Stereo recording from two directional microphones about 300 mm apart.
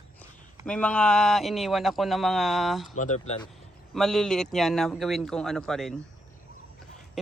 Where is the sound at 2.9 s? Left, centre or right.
Left.